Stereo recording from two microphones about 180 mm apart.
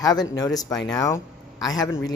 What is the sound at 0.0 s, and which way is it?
Speech, 20° left (ahead or behind).